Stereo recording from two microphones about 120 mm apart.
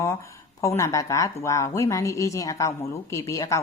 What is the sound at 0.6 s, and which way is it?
A woman's voice, 25° left (ahead or behind).